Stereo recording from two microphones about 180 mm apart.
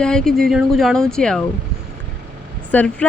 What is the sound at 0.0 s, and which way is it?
Speech, 5° left (ahead or behind).